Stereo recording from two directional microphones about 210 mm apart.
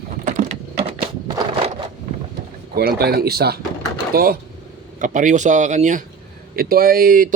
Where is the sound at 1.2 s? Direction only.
20° right (ahead or behind).